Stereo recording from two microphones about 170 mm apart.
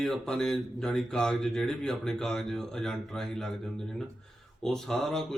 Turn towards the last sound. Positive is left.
turn(degrees=0)  # may be behind; listen again after turning